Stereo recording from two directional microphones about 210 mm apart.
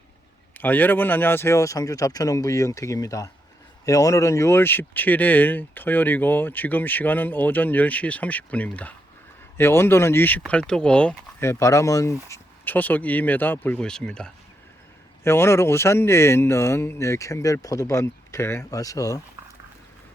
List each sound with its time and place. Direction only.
0.5 s speech: 10° left (ahead or behind)